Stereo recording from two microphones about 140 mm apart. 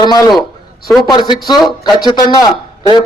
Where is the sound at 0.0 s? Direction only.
30° left (ahead or behind).